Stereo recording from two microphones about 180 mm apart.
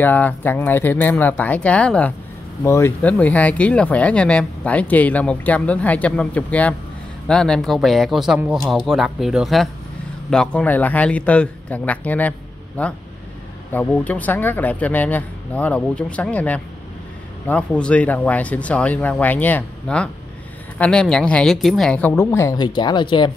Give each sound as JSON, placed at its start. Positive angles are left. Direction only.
{"t": 0.0, "sound": "speech", "side_deg": 10}